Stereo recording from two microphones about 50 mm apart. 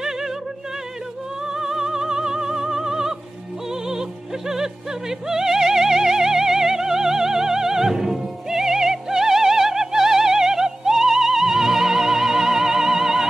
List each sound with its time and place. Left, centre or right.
1.5 s music: centre
5.3 s music: centre